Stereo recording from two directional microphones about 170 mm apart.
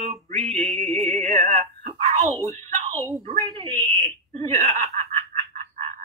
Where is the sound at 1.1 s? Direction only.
40° right (ahead or behind).